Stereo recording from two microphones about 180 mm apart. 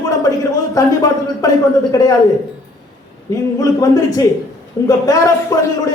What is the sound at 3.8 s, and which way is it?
A man's voice, 20° left (ahead or behind).